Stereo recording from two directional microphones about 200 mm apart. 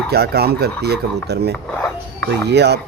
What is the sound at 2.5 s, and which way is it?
Speech, 55° right (ahead or behind).